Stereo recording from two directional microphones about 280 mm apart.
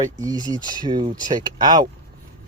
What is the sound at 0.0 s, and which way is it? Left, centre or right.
Speech, centre.